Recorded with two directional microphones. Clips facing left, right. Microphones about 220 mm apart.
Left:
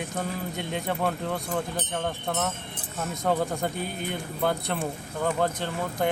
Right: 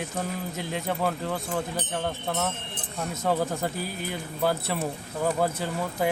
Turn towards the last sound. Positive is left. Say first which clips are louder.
# even
turn(degrees=-5)  # may be behind; listen again after turning